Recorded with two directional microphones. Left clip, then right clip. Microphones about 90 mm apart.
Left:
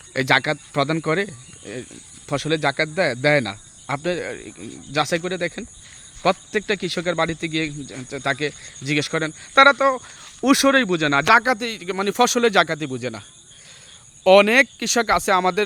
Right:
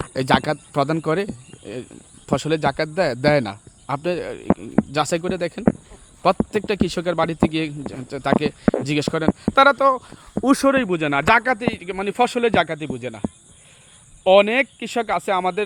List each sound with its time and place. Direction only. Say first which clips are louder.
0.1 s speech: left 1 dB; 15° right (ahead or behind)
10.6 s speech: left 1 dB; 15° left (ahead or behind)
11.4 s a man's voice: even; 35° left (ahead or behind); by 13.2 s 60° left (ahead or behind)
14.3 s speech: left 1 dB; 85° left